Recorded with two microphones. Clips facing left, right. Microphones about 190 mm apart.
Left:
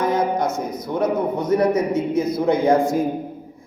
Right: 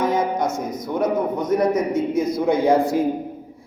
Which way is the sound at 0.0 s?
55° left (ahead or behind).